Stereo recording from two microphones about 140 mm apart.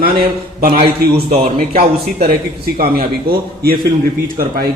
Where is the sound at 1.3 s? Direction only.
45° right (ahead or behind).